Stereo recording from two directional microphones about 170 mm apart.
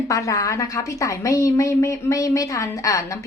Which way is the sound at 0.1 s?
20° left (ahead or behind).